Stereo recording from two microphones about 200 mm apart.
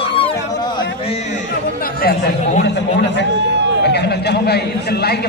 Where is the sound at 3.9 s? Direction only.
55° left (ahead or behind).